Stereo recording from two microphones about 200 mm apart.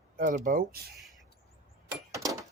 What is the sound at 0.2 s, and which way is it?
Speech, 40° right (ahead or behind).